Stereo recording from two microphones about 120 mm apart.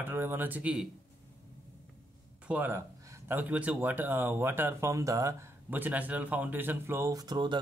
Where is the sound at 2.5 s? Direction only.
15° right (ahead or behind).